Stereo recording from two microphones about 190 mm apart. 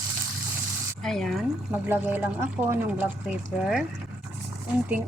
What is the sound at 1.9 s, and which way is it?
Speech, 10° right (ahead or behind).